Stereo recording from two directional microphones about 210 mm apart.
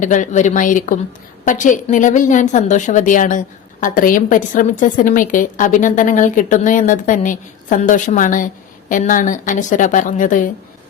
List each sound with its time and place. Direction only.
0.0 s a woman's voice: 35° left (ahead or behind)